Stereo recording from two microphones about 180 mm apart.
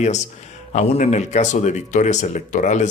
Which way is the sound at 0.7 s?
40° left (ahead or behind).